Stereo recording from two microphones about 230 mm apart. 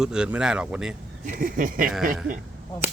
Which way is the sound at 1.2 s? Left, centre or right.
Right.